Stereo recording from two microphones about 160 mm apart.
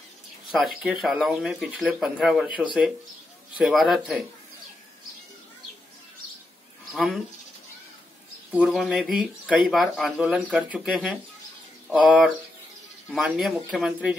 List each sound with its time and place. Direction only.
0.5 s speech: centre (ahead or behind)
6.9 s speech: 5° right (ahead or behind)
8.5 s speech: 5° right (ahead or behind)
13.3 s speech: centre (ahead or behind)